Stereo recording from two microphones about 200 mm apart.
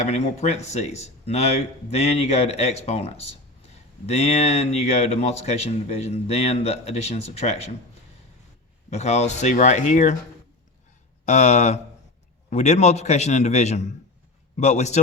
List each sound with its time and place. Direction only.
0.0 s speech: 35° left (ahead or behind)
8.9 s speech: 35° left (ahead or behind)
11.3 s speech: 35° left (ahead or behind)